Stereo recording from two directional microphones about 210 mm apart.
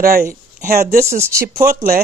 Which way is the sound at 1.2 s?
15° right (ahead or behind).